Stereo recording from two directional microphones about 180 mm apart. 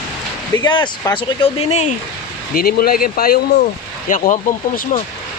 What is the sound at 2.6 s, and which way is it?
Speech, 55° left (ahead or behind).